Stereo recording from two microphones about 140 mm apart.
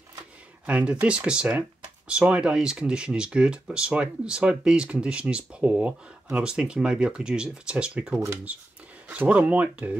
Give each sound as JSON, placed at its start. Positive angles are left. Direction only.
{"t": 0.7, "sound": "speech", "side_deg": -10}
{"t": 8.2, "sound": "speech", "side_deg": -20}